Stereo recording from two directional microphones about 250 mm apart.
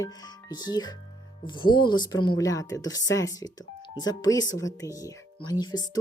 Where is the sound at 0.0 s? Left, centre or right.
Centre.